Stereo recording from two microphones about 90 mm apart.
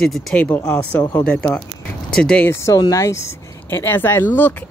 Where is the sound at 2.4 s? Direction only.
35° left (ahead or behind).